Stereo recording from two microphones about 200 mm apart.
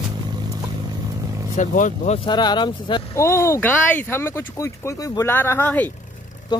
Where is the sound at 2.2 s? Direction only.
20° left (ahead or behind).